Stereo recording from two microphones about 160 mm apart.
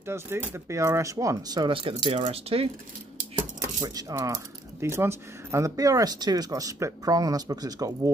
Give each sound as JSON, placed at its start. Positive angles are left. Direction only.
{"t": 0.0, "sound": "speech", "side_deg": -15}
{"t": 3.8, "sound": "speech", "side_deg": -20}